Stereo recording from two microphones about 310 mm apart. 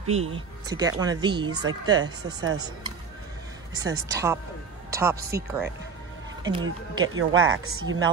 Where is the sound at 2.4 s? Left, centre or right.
Right.